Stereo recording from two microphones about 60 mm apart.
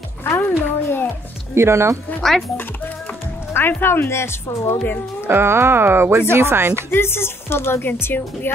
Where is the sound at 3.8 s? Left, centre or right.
Left.